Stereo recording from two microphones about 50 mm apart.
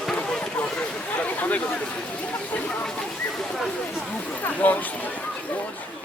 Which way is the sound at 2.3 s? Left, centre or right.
Left.